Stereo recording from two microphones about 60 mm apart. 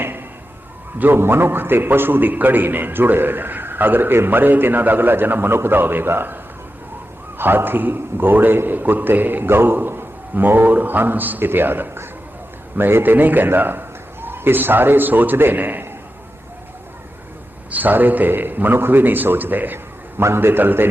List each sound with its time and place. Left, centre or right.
0.9 s a man's voice: right
17.7 s a man's voice: right